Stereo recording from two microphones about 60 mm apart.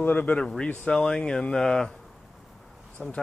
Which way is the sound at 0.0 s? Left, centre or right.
Left.